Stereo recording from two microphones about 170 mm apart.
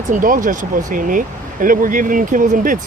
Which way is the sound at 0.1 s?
50° right (ahead or behind).